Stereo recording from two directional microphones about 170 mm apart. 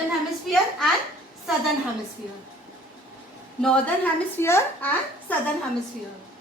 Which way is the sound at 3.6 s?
10° left (ahead or behind).